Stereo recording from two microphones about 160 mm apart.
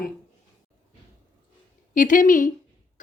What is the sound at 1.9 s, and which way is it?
Speech, 55° left (ahead or behind).